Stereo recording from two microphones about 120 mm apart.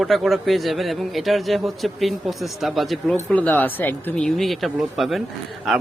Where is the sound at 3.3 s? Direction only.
15° left (ahead or behind).